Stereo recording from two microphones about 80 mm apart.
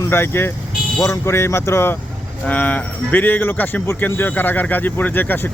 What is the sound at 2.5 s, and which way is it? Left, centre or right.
Speech, left.